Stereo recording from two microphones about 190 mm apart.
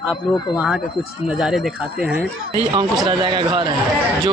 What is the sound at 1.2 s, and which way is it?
Speech, 5° right (ahead or behind).